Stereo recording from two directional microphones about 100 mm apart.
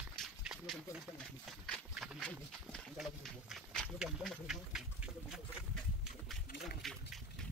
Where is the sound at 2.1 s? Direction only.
5° left (ahead or behind).